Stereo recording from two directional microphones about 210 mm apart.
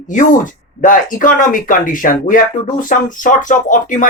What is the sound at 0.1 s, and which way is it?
Speech, 40° left (ahead or behind).